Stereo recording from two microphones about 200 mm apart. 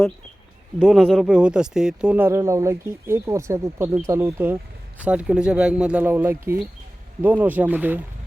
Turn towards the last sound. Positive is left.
turn(degrees=-10)  # may be behind; listen again after turning